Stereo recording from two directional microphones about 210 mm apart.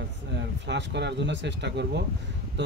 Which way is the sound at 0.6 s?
55° right (ahead or behind).